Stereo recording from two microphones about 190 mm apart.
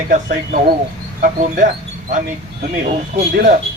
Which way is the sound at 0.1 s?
45° right (ahead or behind).